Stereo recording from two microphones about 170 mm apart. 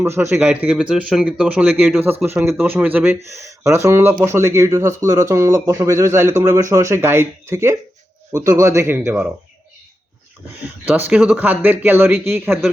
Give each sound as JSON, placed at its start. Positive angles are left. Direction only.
{"t": 0.0, "sound": "speech", "side_deg": -15}
{"t": 10.8, "sound": "speech", "side_deg": -10}